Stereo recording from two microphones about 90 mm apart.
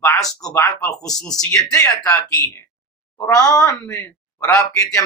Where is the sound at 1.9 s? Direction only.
40° left (ahead or behind).